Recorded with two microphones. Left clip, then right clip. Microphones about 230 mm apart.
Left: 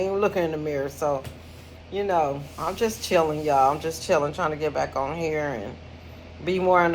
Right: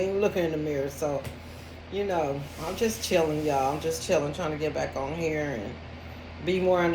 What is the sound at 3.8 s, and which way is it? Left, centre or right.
Speech, centre.